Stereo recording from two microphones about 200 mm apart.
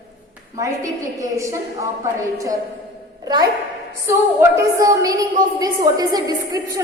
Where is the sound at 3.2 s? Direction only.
20° right (ahead or behind).